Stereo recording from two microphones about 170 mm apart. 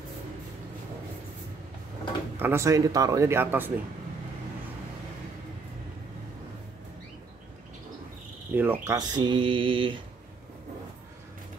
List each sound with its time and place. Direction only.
2.3 s a man's voice: 15° right (ahead or behind)
8.5 s a man's voice: 10° right (ahead or behind)
8.9 s mantra: 25° right (ahead or behind)